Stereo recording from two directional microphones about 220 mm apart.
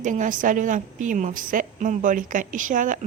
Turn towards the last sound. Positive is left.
turn(degrees=-35)  # may be behind; listen again after turning